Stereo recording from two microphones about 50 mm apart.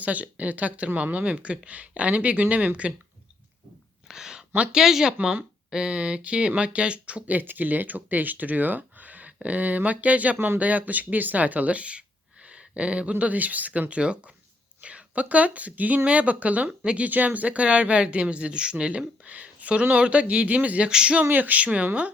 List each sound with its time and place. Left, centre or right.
0.0 s speech: right
4.1 s a sound: centre
4.7 s speech: centre; by 10.3 s right
10.3 s speech: right
10.6 s speech: right
17.1 s speech: right
20.9 s speech: centre
21.2 s speech: right